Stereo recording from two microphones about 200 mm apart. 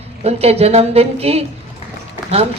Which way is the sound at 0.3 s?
30° right (ahead or behind).